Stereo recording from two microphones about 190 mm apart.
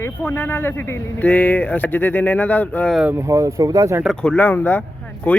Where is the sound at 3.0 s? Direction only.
10° right (ahead or behind).